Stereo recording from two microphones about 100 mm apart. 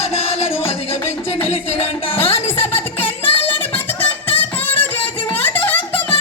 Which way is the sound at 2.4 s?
20° left (ahead or behind).